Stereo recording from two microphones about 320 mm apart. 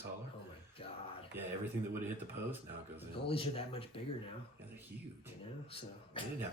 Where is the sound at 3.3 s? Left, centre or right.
Centre.